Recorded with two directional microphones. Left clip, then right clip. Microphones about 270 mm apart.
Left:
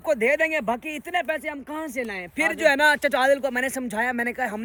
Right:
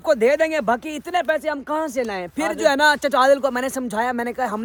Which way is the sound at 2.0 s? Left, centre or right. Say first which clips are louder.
Right 3 dB; right.